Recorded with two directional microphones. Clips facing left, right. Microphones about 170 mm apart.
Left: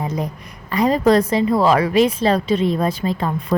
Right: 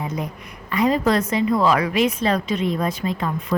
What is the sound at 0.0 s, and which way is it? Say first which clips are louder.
A woman's voice: left 3 dB; 35° left (ahead or behind).